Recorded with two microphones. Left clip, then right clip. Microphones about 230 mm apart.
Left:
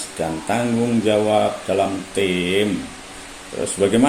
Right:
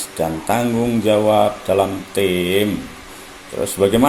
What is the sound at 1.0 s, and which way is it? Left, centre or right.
Speech, right.